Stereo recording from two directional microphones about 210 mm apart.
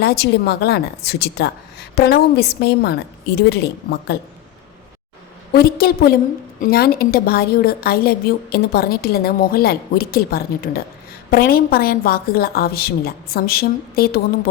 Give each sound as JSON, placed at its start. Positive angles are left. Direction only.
{"t": 0.0, "sound": "a woman's voice", "side_deg": 50}
{"t": 5.5, "sound": "a woman's voice", "side_deg": 45}